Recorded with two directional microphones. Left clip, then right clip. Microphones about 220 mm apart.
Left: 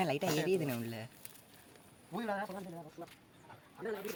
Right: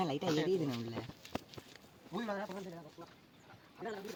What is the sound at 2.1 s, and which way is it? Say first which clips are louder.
Speech: left 2 dB; 20° left (ahead or behind).